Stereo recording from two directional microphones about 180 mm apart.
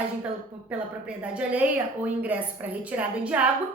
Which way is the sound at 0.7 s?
5° right (ahead or behind).